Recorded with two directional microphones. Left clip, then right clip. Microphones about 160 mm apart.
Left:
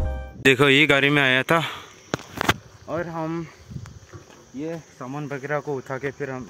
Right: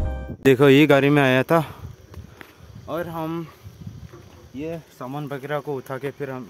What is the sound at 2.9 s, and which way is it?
Speech, 10° right (ahead or behind).